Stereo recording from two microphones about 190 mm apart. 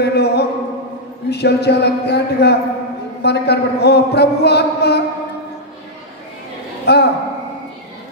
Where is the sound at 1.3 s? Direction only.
60° left (ahead or behind).